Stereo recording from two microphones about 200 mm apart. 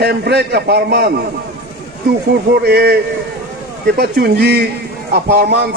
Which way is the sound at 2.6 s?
55° right (ahead or behind).